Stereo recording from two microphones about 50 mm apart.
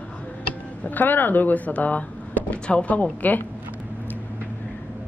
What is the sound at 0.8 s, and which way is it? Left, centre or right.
Speech, left.